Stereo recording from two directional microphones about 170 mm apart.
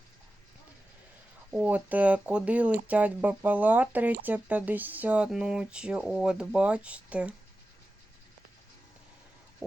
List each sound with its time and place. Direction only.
1.5 s speech: 5° right (ahead or behind)